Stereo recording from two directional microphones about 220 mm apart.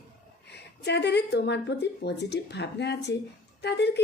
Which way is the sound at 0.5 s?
50° left (ahead or behind).